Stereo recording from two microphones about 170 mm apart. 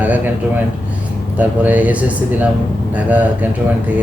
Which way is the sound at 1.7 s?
10° right (ahead or behind).